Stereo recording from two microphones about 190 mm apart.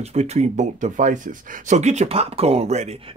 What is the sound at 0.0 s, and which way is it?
Speech, 35° right (ahead or behind).